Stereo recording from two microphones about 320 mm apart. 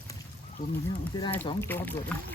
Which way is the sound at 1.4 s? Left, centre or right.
Centre.